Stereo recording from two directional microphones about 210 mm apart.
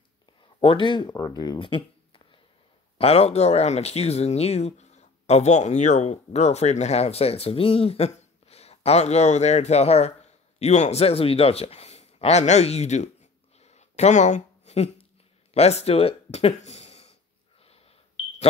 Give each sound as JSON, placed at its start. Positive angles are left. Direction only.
{"t": 0.6, "sound": "speech", "side_deg": 25}
{"t": 13.6, "sound": "a sound", "side_deg": 30}
{"t": 15.5, "sound": "speech", "side_deg": 30}
{"t": 17.6, "sound": "smoke detector", "side_deg": 30}